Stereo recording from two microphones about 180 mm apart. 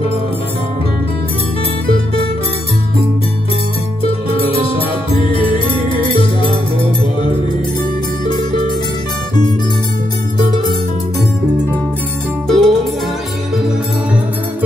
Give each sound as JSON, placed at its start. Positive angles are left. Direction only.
{"t": 4.4, "sound": "music", "side_deg": 30}
{"t": 12.4, "sound": "music", "side_deg": 0}